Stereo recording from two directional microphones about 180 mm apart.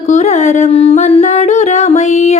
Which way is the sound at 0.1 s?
40° left (ahead or behind).